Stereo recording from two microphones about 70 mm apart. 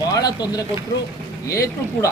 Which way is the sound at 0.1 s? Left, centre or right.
Left.